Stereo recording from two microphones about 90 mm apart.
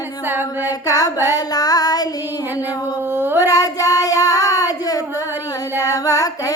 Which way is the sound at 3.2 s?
25° right (ahead or behind).